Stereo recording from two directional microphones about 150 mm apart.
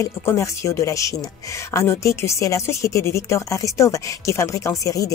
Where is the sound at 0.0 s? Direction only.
20° left (ahead or behind).